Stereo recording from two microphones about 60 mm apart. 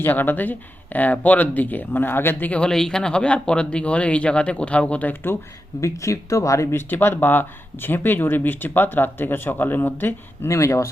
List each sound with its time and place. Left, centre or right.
0.0 s speech: left
2.5 s speech: centre
5.8 s speech: left
6.7 s speech: left
10.5 s speech: left